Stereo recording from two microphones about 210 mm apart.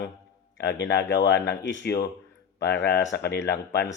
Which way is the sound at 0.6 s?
55° left (ahead or behind).